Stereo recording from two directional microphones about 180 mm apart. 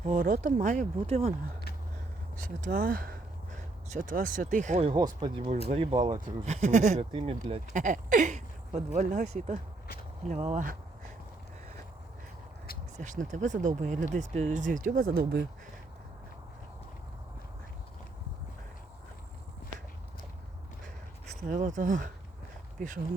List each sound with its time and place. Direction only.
0.0 s speech: 45° right (ahead or behind)
2.4 s speech: 50° right (ahead or behind)
4.9 s speech: 20° right (ahead or behind)
6.4 s speech: 40° right (ahead or behind)
7.7 s speech: 45° right (ahead or behind)
10.2 s speech: 40° right (ahead or behind)
13.0 s speech: 45° right (ahead or behind); by 15.4 s 60° right (ahead or behind)
21.5 s speech: 45° right (ahead or behind)